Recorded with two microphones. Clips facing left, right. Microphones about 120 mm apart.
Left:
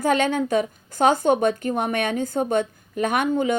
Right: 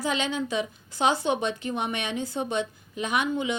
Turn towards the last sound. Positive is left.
turn(degrees=50)  # may be behind; listen again after turning